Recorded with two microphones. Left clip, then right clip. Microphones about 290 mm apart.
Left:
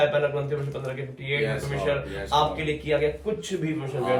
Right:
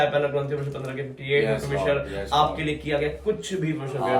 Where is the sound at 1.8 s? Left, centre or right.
Centre.